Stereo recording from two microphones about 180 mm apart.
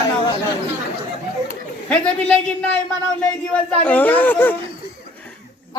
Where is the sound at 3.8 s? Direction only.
10° left (ahead or behind).